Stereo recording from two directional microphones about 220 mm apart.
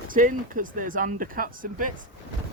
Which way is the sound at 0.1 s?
35° right (ahead or behind).